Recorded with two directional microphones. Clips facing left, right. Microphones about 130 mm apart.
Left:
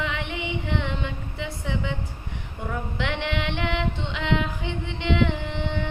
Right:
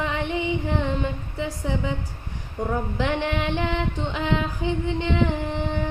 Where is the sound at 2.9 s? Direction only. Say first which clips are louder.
Right 1 dB; 35° right (ahead or behind).